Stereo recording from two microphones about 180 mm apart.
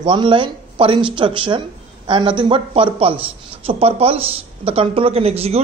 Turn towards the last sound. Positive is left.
turn(degrees=-35)  # may be behind; listen again after turning